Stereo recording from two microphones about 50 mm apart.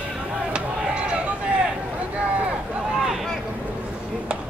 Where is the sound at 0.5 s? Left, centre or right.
Centre.